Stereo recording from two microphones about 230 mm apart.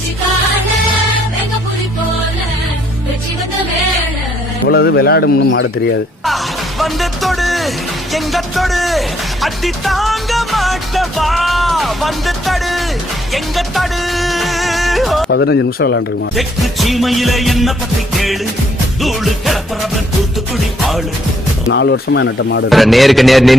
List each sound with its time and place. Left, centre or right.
4.7 s speech: left
6.2 s music: centre
15.3 s speech: left
16.3 s music: centre
19.0 s music: centre
21.7 s speech: left
22.7 s music: centre